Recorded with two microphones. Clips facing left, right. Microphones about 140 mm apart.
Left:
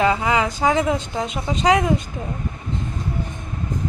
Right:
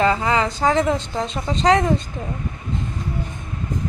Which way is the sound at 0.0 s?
5° left (ahead or behind).